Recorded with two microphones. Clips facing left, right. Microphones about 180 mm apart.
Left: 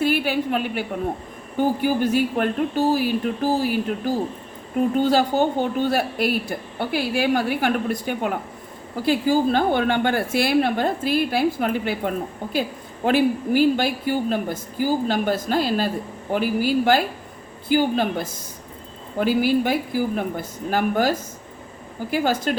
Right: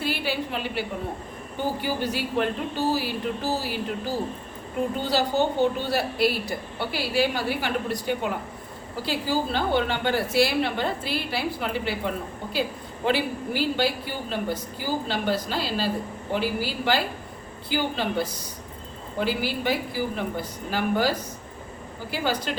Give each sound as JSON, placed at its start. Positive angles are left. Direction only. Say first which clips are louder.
{"t": 0.0, "sound": "a woman's voice", "louder": "left 7 dB", "side_deg": 50}